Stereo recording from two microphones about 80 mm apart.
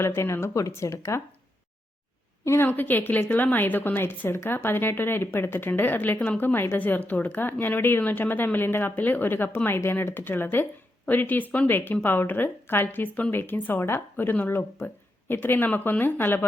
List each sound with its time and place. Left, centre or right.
0.0 s speech: left
2.4 s a woman's voice: left
2.6 s a woman's voice: left